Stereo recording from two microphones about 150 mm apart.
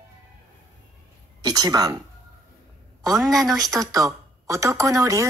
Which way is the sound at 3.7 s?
25° right (ahead or behind).